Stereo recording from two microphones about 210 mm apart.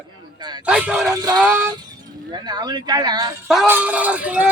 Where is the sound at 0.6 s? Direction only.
5° right (ahead or behind).